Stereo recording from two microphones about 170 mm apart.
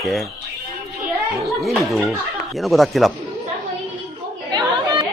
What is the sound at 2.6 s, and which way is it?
Speech, centre (ahead or behind).